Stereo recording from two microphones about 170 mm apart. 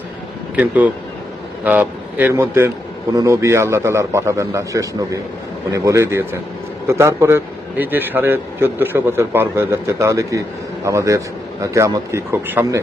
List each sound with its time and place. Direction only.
0.5 s a man's voice: 10° right (ahead or behind)